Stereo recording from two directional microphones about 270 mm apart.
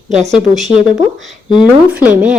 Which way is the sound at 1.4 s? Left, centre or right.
Centre.